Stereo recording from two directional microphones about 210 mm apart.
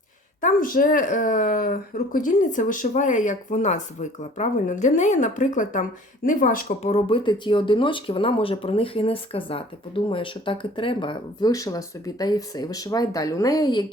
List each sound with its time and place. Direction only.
0.4 s speech: 40° left (ahead or behind)
6.9 s speech: 25° left (ahead or behind)